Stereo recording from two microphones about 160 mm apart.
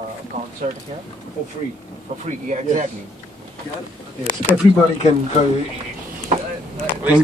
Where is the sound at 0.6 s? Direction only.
50° right (ahead or behind).